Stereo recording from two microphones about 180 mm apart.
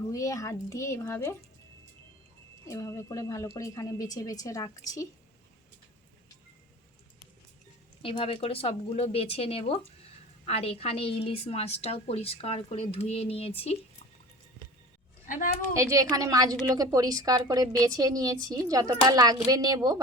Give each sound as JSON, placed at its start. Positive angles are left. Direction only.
{"t": 0.1, "sound": "speech", "side_deg": 20}
{"t": 2.6, "sound": "speech", "side_deg": 15}
{"t": 8.0, "sound": "a woman's voice", "side_deg": 30}
{"t": 15.3, "sound": "a woman's voice", "side_deg": 45}
{"t": 15.7, "sound": "a woman's voice", "side_deg": -15}